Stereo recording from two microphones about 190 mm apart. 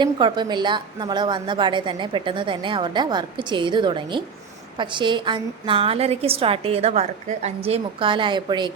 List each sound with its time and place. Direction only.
0.0 s a woman's voice: 25° right (ahead or behind)